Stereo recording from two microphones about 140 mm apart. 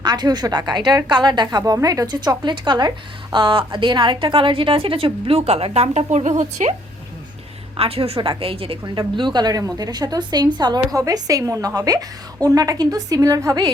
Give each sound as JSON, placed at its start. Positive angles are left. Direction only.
{"t": 0.0, "sound": "a woman's voice", "side_deg": -30}
{"t": 7.8, "sound": "a woman's voice", "side_deg": -45}
{"t": 8.8, "sound": "a woman's voice", "side_deg": -30}